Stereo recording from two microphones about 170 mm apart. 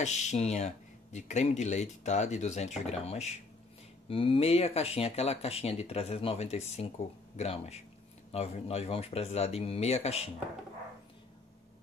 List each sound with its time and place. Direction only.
0.0 s speech: 40° left (ahead or behind)